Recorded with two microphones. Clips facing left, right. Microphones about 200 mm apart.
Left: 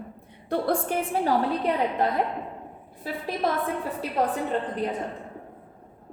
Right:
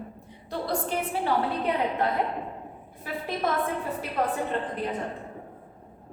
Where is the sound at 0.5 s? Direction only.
50° left (ahead or behind).